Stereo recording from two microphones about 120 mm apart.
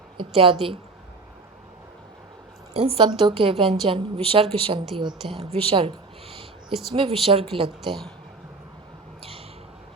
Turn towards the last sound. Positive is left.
turn(degrees=-45)  # may be behind; listen again after turning